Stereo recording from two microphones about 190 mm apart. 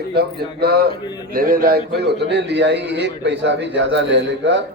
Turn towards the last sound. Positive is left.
turn(degrees=-70)  # may be behind; listen again after turning